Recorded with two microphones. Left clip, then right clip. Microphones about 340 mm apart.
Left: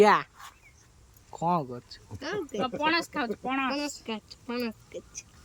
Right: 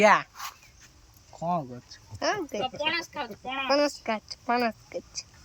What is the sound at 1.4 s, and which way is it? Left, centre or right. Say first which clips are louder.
Speech: left 2 dB; centre.